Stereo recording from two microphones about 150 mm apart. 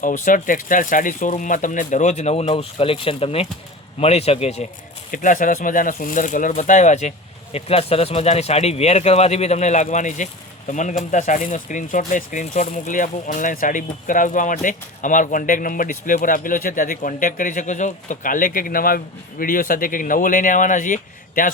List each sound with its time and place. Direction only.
0.0 s speech: 60° left (ahead or behind); by 4.6 s 45° left (ahead or behind)
5.1 s speech: 60° left (ahead or behind)